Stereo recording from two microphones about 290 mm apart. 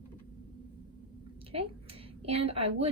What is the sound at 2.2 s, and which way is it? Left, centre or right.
Speech, centre.